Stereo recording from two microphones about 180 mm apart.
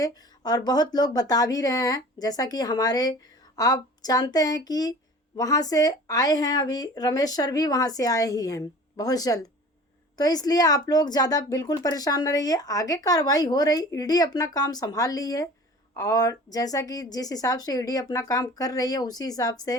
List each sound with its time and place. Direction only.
0.0 s speech: 20° left (ahead or behind)